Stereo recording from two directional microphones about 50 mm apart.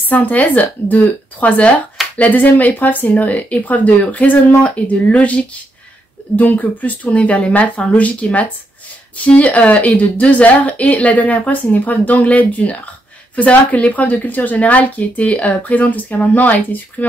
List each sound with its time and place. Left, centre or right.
0.1 s a woman's voice: left